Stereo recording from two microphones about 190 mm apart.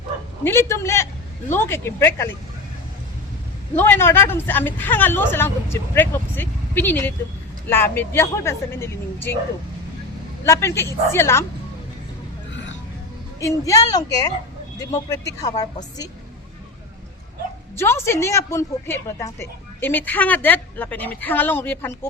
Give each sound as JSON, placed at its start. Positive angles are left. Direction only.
{"t": 0.4, "sound": "a woman's voice", "side_deg": 15}
{"t": 3.8, "sound": "a woman's voice", "side_deg": 10}
{"t": 10.4, "sound": "a woman's voice", "side_deg": 15}
{"t": 13.4, "sound": "a woman's voice", "side_deg": 15}
{"t": 17.7, "sound": "a woman's voice", "side_deg": 15}